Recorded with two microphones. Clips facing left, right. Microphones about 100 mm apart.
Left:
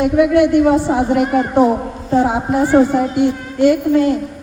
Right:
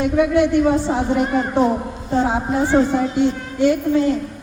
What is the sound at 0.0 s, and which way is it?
A man's voice, 15° left (ahead or behind).